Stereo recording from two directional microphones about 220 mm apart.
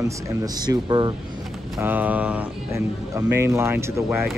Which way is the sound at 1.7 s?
10° right (ahead or behind).